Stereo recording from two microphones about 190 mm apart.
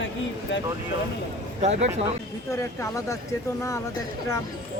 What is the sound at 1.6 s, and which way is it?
Speech, 35° right (ahead or behind).